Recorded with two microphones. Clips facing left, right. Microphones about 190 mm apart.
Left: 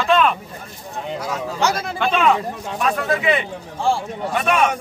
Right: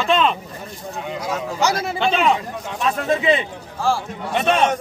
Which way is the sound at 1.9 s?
25° right (ahead or behind).